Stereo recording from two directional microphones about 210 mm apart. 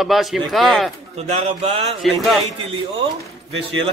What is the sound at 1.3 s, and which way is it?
Speech, 30° right (ahead or behind).